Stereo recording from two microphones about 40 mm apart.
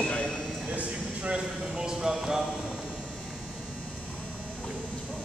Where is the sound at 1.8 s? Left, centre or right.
Centre.